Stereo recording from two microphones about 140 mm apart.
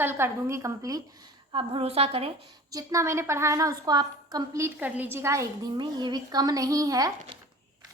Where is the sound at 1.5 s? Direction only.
40° right (ahead or behind).